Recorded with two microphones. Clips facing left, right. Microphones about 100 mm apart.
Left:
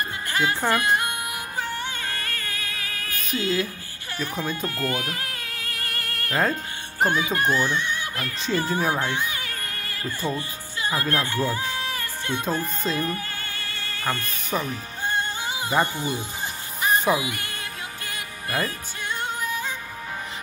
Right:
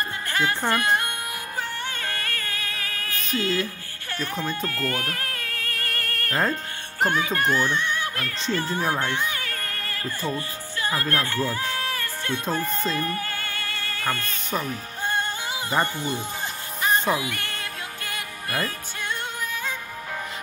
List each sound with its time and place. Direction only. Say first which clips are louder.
0.3 s speech: left 1 dB; 5° left (ahead or behind)
2.2 s a sound: right 1 dB; 45° right (ahead or behind)
4.1 s speech: even; 10° left (ahead or behind)
5.3 s a sound: right 2 dB; 50° right (ahead or behind)
7.0 s speech: left 1 dB; 10° left (ahead or behind)
9.2 s music: right 1 dB; 50° right (ahead or behind)
10.0 s speech: left 1 dB; 20° left (ahead or behind)
13.2 s music: right 3 dB; 45° right (ahead or behind)
14.5 s speech: left 1 dB; 5° left (ahead or behind)
15.7 s speech: left 1 dB; 10° left (ahead or behind)
16.8 s music: left 1 dB; 10° left (ahead or behind)
17.5 s music: right 1 dB; 50° right (ahead or behind)